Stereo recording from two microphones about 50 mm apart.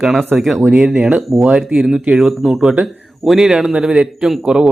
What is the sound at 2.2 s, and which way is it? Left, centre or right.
Speech, centre.